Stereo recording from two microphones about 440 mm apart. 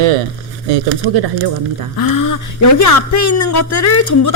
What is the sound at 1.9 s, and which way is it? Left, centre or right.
Speech, left.